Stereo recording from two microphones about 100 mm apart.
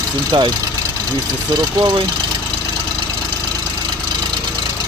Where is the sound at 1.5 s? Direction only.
45° right (ahead or behind).